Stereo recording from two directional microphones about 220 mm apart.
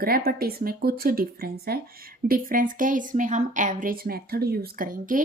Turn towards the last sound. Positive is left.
turn(degrees=-40)  # may be behind; listen again after turning